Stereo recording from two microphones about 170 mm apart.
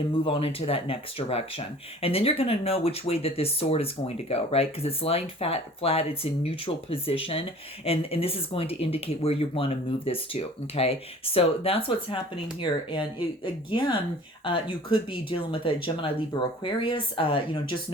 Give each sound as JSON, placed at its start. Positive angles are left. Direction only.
{"t": 0.3, "sound": "speech", "side_deg": 35}